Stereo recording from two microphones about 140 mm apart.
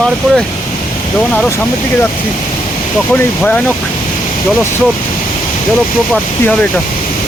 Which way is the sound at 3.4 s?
10° left (ahead or behind).